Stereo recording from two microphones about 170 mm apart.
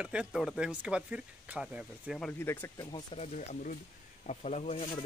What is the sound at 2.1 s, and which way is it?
Speech, 10° left (ahead or behind).